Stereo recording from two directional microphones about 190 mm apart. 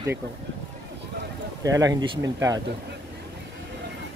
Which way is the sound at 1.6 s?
20° right (ahead or behind).